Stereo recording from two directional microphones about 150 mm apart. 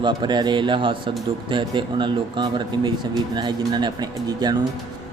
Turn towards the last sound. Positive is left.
turn(degrees=-25)  # may be behind; listen again after turning